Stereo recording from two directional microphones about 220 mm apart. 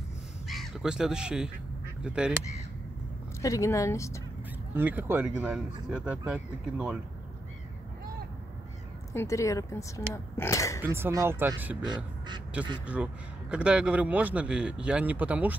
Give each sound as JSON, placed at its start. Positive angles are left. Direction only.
{"t": 0.5, "sound": "a man's voice", "side_deg": 0}
{"t": 3.4, "sound": "speech", "side_deg": 15}
{"t": 4.7, "sound": "speech", "side_deg": -10}
{"t": 9.1, "sound": "speech", "side_deg": 10}
{"t": 10.8, "sound": "speech", "side_deg": -10}
{"t": 11.8, "sound": "speech", "side_deg": -20}
{"t": 12.8, "sound": "a man's voice", "side_deg": -5}